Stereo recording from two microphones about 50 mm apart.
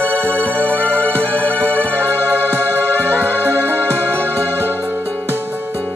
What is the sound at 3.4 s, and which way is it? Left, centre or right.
Music, right.